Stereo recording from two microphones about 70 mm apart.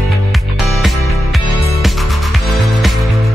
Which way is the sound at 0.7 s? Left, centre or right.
Centre.